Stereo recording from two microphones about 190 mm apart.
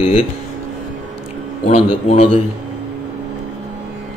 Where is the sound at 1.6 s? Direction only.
35° left (ahead or behind).